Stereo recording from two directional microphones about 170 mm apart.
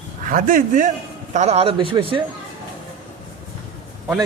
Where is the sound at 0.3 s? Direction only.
50° right (ahead or behind); by 2.2 s 30° right (ahead or behind).